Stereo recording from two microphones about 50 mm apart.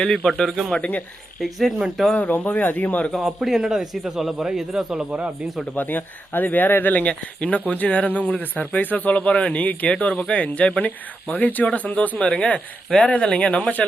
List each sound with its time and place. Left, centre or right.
0.1 s a man's voice: centre
0.8 s speech: left
1.4 s a man's voice: centre
2.1 s speech: left
3.1 s a man's voice: centre
5.7 s speech: left
12.2 s speech: left